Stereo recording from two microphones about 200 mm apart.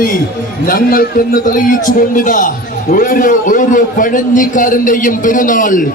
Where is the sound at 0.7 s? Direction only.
45° left (ahead or behind).